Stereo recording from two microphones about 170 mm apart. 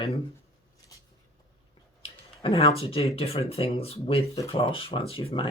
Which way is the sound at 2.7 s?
35° left (ahead or behind).